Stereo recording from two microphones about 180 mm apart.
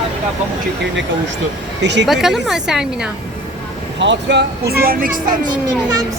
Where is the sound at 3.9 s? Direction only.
75° right (ahead or behind); by 5.5 s 50° right (ahead or behind).